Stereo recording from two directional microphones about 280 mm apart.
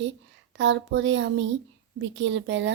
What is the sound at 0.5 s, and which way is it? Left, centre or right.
Speech, right.